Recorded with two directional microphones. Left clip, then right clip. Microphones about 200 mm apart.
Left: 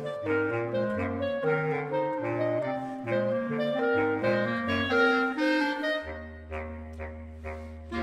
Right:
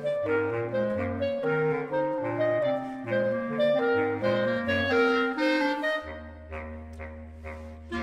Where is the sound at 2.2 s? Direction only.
20° left (ahead or behind).